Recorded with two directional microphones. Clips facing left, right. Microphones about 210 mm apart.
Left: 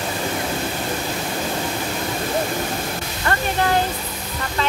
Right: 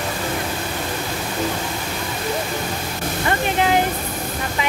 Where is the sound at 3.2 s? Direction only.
15° right (ahead or behind).